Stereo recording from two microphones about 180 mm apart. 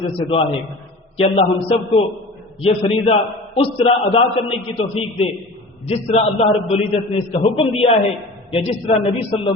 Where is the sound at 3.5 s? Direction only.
30° left (ahead or behind).